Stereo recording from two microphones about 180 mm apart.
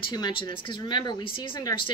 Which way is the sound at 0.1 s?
25° left (ahead or behind).